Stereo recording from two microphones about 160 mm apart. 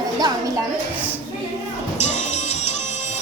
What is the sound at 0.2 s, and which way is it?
Music, 25° right (ahead or behind).